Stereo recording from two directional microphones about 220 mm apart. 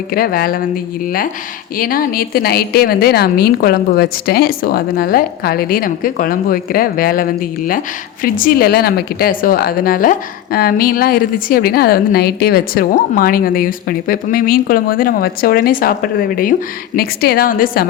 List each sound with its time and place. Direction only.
0.1 s a woman's voice: 40° left (ahead or behind)
1.8 s a woman's voice: 40° left (ahead or behind)
17.0 s a woman's voice: 45° left (ahead or behind)